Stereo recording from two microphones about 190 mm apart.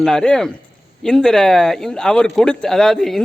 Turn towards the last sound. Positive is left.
turn(degrees=0)  # may be behind; listen again after turning